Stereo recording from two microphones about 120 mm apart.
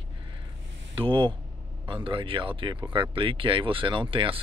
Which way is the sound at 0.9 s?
45° right (ahead or behind).